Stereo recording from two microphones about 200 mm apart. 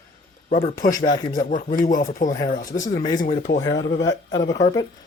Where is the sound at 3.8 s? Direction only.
65° left (ahead or behind).